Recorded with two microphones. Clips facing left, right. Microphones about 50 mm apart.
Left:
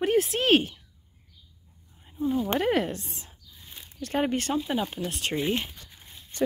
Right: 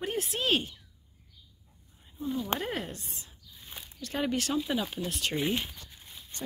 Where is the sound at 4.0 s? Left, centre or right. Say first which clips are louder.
Left 4 dB; left.